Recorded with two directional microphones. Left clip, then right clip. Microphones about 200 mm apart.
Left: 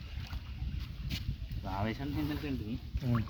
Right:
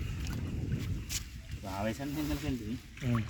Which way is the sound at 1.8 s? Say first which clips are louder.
Right 3 dB; 35° right (ahead or behind).